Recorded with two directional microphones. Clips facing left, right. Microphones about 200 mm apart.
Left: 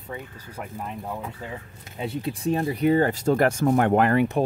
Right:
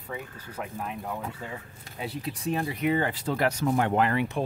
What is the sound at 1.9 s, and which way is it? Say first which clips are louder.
Speech: left 5 dB; 25° left (ahead or behind).